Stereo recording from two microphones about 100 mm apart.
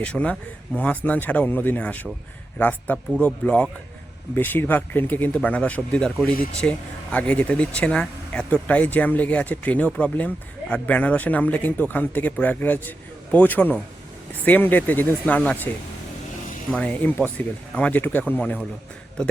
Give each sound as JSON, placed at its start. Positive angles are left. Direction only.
{"t": 0.0, "sound": "speech", "side_deg": 10}
{"t": 16.7, "sound": "speech", "side_deg": 15}